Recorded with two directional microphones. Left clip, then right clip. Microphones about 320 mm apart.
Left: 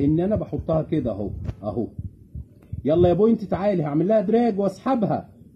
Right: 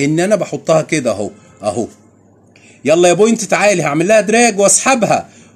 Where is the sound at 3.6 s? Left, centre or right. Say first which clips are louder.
Right 9 dB; right.